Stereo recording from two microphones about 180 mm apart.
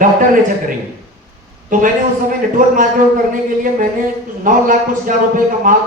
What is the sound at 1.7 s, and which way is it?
A man's voice, 45° right (ahead or behind).